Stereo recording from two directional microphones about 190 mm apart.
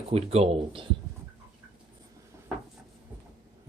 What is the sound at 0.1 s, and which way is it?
Speech, 35° right (ahead or behind).